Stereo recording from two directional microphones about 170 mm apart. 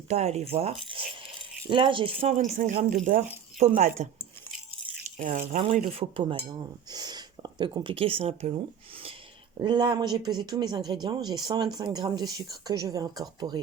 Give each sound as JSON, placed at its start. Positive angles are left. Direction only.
{"t": 0.1, "sound": "cutlery", "side_deg": -40}
{"t": 1.7, "sound": "cutlery", "side_deg": -30}
{"t": 2.3, "sound": "speech", "side_deg": -50}
{"t": 5.1, "sound": "speech", "side_deg": -45}
{"t": 5.7, "sound": "cutlery", "side_deg": -35}
{"t": 9.6, "sound": "speech", "side_deg": -25}